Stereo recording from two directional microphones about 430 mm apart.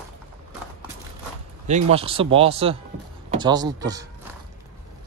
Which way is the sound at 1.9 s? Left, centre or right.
Centre.